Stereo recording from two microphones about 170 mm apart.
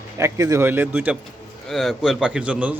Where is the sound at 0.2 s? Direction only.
20° right (ahead or behind).